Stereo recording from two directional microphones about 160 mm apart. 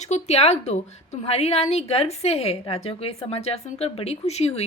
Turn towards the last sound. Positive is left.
turn(degrees=40)  # may be behind; listen again after turning